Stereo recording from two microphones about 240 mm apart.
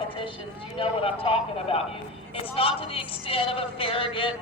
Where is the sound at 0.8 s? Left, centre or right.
Left.